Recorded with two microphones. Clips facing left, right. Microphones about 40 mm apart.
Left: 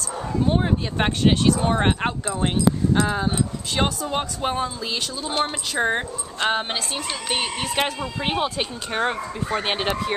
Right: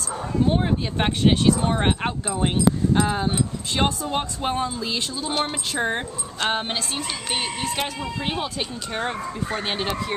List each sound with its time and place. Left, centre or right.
0.5 s speech: centre
6.4 s speech: centre
8.0 s speech: left